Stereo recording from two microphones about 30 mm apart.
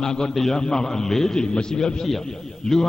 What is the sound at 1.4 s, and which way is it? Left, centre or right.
A man's voice, left.